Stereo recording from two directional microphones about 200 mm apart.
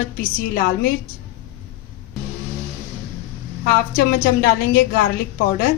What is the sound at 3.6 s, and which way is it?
A woman's voice, 45° left (ahead or behind).